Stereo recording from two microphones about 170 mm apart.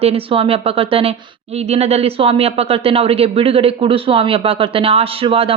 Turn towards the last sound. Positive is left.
turn(degrees=-35)  # may be behind; listen again after turning